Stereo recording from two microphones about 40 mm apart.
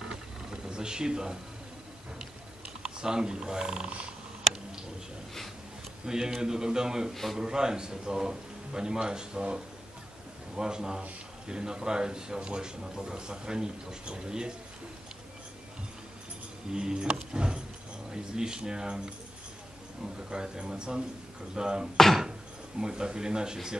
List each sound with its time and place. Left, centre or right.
0.1 s a sound: centre
2.8 s speech: centre
6.0 s a man's voice: centre
16.7 s a man's voice: centre
20.2 s a man's voice: centre
21.9 s speech: centre
22.8 s a man's voice: centre